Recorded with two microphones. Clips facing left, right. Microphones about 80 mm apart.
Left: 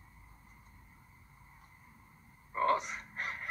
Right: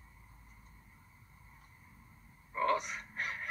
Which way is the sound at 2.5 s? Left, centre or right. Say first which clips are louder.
Left 2 dB; left.